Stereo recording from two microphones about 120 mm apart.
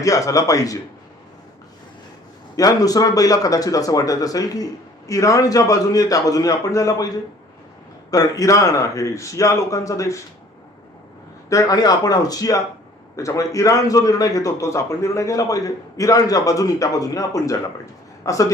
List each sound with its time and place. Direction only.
0.0 s speech: 30° left (ahead or behind)
2.6 s speech: 30° left (ahead or behind)
8.1 s speech: 30° left (ahead or behind)
11.4 s speech: 30° left (ahead or behind)